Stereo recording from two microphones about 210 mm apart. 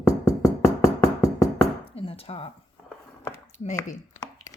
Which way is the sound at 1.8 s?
25° left (ahead or behind).